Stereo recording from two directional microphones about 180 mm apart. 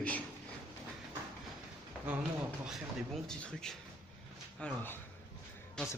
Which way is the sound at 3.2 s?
5° left (ahead or behind).